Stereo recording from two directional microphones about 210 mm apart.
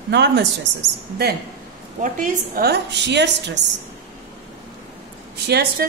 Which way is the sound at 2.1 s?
45° right (ahead or behind).